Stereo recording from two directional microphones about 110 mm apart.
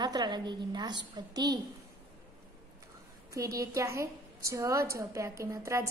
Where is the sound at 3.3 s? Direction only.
30° right (ahead or behind).